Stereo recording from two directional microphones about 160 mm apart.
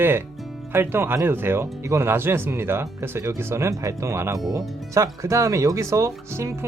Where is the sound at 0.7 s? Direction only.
15° right (ahead or behind).